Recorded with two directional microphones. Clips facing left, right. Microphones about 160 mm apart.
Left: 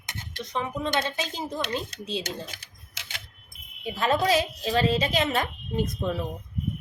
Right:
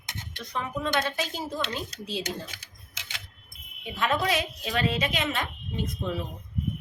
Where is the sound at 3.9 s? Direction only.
35° left (ahead or behind).